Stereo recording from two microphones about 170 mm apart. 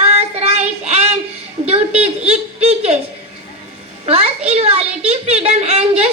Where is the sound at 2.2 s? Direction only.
40° right (ahead or behind).